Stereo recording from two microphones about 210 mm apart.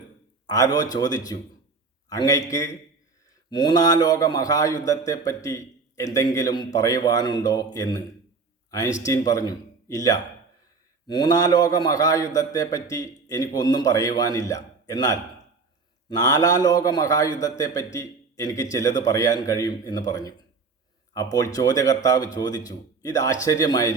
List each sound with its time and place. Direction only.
0.4 s a man's voice: 20° left (ahead or behind)
9.0 s a man's voice: 15° left (ahead or behind)